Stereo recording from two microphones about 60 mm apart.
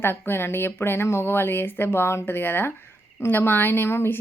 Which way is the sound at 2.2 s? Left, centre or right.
Left.